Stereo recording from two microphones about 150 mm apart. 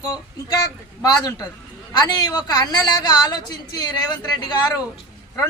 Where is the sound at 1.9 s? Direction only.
30° left (ahead or behind).